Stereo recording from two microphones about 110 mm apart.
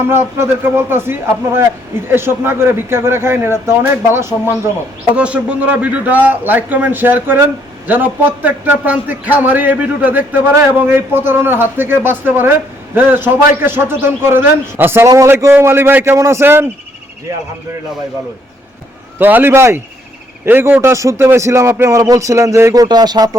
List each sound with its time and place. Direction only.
0.0 s a man's voice: 20° right (ahead or behind)
5.1 s a man's voice: 10° right (ahead or behind)
19.2 s a man's voice: 20° right (ahead or behind); by 23.4 s 35° right (ahead or behind)